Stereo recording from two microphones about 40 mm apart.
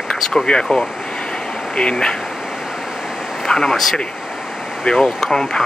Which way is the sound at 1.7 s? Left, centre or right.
Left.